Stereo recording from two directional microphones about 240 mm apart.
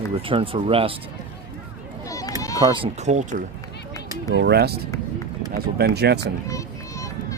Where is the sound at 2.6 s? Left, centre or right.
Right.